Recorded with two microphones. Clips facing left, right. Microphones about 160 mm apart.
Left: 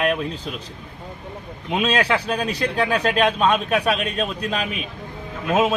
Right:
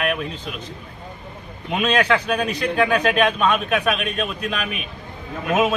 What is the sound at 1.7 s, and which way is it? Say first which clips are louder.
Speech: right 1 dB; 30° left (ahead or behind).